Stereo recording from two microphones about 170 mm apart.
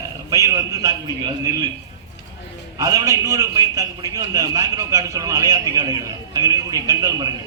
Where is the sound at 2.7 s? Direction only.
20° right (ahead or behind).